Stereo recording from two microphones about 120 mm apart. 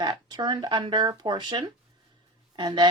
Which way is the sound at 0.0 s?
40° right (ahead or behind).